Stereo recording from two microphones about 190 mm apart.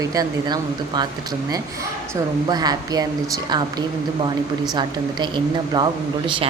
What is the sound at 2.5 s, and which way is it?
Speech, 20° right (ahead or behind).